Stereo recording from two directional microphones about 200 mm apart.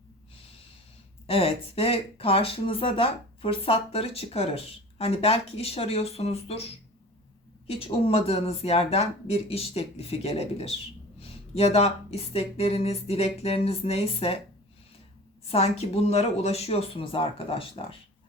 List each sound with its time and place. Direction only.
1.3 s speech: 30° left (ahead or behind)
7.7 s speech: 25° left (ahead or behind)
15.4 s speech: 30° left (ahead or behind)